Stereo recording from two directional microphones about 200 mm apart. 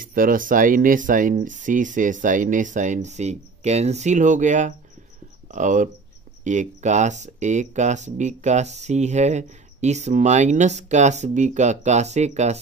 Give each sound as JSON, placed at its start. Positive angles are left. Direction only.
{"t": 0.0, "sound": "speech", "side_deg": -45}